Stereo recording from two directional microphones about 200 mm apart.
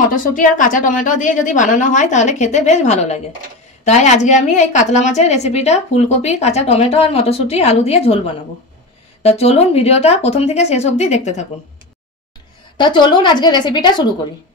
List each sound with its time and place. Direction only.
0.1 s a woman's voice: 40° left (ahead or behind)
9.2 s a woman's voice: 30° left (ahead or behind)
12.7 s speech: 25° left (ahead or behind)